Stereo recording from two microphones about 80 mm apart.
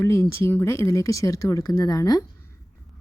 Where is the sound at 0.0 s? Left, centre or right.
Left.